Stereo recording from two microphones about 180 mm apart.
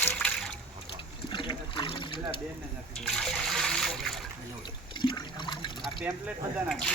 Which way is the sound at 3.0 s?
5° left (ahead or behind).